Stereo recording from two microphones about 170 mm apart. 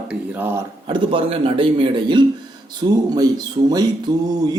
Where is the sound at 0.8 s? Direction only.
30° right (ahead or behind).